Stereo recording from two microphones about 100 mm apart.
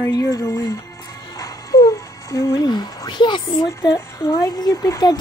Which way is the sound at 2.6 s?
45° left (ahead or behind).